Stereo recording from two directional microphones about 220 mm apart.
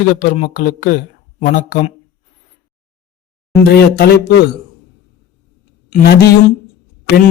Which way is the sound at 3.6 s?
45° left (ahead or behind).